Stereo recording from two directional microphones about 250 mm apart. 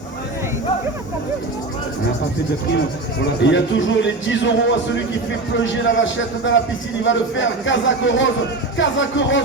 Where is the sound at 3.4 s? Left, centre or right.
Left.